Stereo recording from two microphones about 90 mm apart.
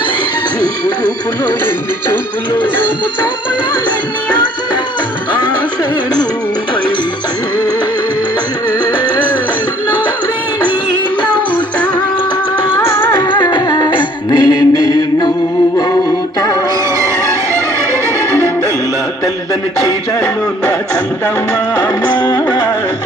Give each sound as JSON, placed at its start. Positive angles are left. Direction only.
{"t": 0.6, "sound": "music", "side_deg": 50}
{"t": 13.2, "sound": "music", "side_deg": 60}
{"t": 21.7, "sound": "music", "side_deg": 45}